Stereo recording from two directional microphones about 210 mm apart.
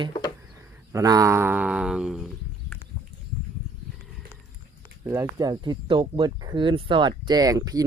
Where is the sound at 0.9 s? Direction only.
15° right (ahead or behind).